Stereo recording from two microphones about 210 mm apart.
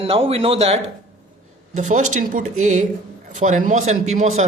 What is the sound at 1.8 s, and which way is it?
Speech, 35° right (ahead or behind).